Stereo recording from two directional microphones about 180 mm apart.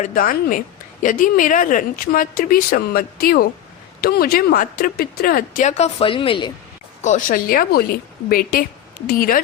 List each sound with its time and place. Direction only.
0.0 s speech: 50° left (ahead or behind); by 6.5 s 30° left (ahead or behind)
7.0 s speech: 45° left (ahead or behind)